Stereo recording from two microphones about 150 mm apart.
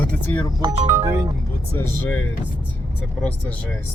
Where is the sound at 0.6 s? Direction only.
40° right (ahead or behind).